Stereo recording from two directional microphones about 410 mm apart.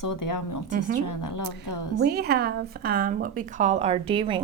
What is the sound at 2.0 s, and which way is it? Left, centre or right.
A woman's voice, right.